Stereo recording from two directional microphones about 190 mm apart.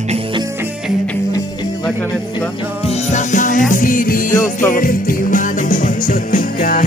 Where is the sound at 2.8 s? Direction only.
35° left (ahead or behind).